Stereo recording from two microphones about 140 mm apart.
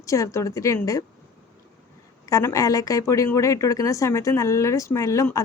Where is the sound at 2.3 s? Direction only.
25° left (ahead or behind).